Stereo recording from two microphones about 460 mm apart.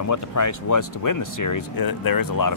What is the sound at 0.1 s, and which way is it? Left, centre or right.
Speech, left.